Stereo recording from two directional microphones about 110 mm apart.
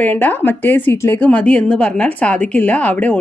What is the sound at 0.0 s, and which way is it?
A woman's voice, 15° left (ahead or behind).